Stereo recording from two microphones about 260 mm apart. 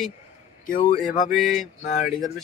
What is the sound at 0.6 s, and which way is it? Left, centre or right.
Speech, left.